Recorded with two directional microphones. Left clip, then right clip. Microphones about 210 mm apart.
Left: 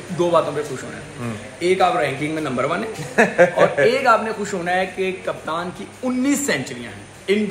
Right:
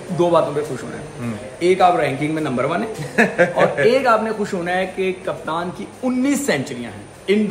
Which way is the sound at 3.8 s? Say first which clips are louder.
Right 1 dB; 20° right (ahead or behind).